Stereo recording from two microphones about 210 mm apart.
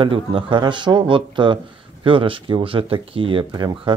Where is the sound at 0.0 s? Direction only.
25° right (ahead or behind).